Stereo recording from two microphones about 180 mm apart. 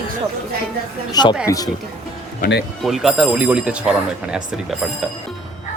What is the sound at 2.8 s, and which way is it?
Speech, centre (ahead or behind).